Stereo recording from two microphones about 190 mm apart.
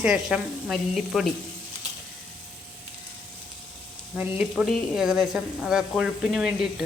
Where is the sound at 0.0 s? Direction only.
5° right (ahead or behind).